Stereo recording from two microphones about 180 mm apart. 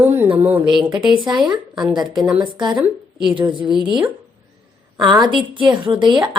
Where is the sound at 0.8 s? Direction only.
25° right (ahead or behind).